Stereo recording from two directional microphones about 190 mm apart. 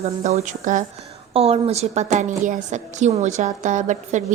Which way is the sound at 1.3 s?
30° right (ahead or behind).